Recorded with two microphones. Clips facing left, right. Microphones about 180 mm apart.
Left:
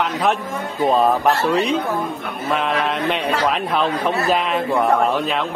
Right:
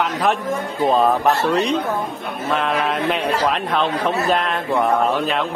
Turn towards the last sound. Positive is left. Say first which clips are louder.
# left 1 dB
turn(degrees=0)  # may be behind; listen again after turning